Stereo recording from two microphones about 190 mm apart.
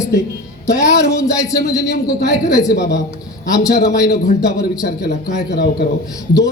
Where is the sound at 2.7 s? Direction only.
60° left (ahead or behind).